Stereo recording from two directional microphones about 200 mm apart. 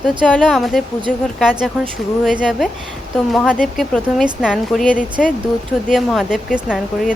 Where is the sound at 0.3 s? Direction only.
5° left (ahead or behind).